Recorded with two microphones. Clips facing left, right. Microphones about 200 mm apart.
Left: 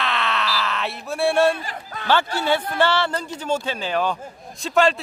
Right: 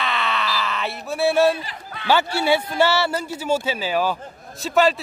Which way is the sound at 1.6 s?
45° left (ahead or behind).